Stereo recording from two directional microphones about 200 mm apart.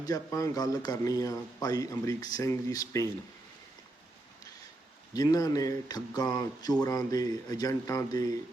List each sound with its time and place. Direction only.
0.0 s speech: 15° left (ahead or behind)
5.1 s speech: 20° left (ahead or behind)